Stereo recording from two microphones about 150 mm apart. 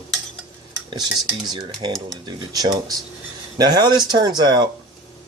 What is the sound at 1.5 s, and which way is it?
Speech, 30° right (ahead or behind).